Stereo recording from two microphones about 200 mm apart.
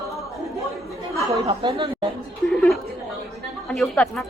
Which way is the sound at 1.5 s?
30° right (ahead or behind).